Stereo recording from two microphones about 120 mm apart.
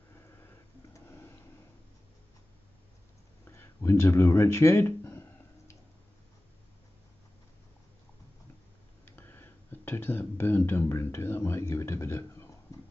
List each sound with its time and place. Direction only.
0.9 s printer: 20° left (ahead or behind)
3.4 s a sound: 20° left (ahead or behind)
9.0 s speech: 15° left (ahead or behind)